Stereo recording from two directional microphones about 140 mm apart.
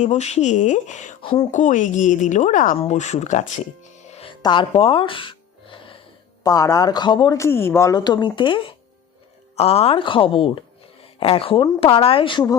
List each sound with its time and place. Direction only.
0.0 s speech: 55° left (ahead or behind)
1.2 s speech: 40° left (ahead or behind)
1.5 s speech: 60° left (ahead or behind)
3.9 s music: 50° left (ahead or behind)
4.3 s gasp: 35° left (ahead or behind)
6.4 s a woman's voice: 25° left (ahead or behind)
7.3 s a woman's voice: 20° left (ahead or behind); by 8.6 s 35° left (ahead or behind)
9.6 s speech: 45° left (ahead or behind)